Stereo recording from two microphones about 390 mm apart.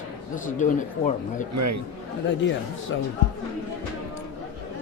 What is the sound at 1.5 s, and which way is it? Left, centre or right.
Speech, right.